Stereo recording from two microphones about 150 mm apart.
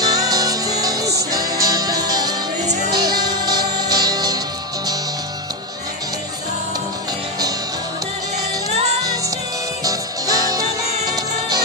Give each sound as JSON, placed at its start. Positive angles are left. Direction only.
{"t": 0.0, "sound": "music", "side_deg": -25}
{"t": 2.6, "sound": "music", "side_deg": -50}
{"t": 3.0, "sound": "music", "side_deg": -25}
{"t": 9.8, "sound": "music", "side_deg": -25}